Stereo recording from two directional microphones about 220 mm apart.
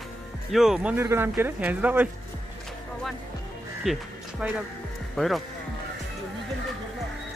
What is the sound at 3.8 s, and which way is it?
Music, 5° right (ahead or behind).